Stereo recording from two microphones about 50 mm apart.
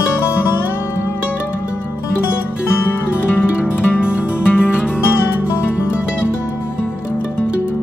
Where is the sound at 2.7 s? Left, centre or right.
Left.